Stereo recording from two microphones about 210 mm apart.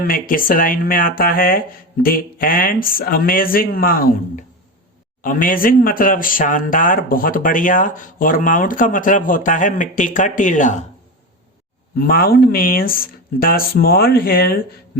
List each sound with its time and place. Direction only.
0.0 s speech: 40° left (ahead or behind)
11.9 s speech: 45° left (ahead or behind)